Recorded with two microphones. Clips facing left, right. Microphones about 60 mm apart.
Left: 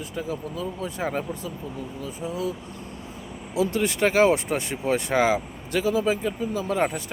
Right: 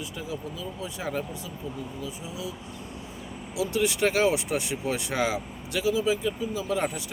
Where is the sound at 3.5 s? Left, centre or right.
Left.